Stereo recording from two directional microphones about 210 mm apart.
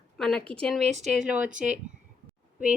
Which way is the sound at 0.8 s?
30° right (ahead or behind).